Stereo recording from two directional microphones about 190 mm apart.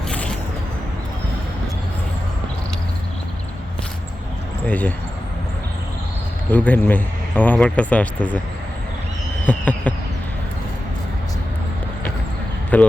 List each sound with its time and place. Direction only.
0.1 s a sound: 5° left (ahead or behind)
4.6 s speech: 10° left (ahead or behind)
6.5 s speech: 10° left (ahead or behind)
9.5 s speech: 10° left (ahead or behind)
12.7 s speech: 10° left (ahead or behind)